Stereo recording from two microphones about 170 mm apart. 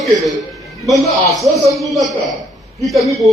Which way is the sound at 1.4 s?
20° right (ahead or behind).